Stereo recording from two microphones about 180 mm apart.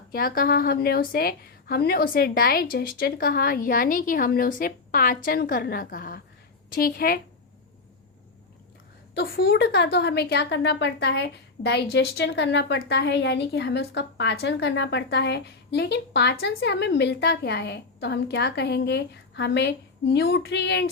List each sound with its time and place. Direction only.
0.1 s a woman's voice: 55° left (ahead or behind)
9.1 s a woman's voice: 60° left (ahead or behind)